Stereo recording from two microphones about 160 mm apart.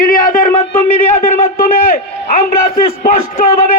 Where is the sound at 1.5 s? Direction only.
65° left (ahead or behind).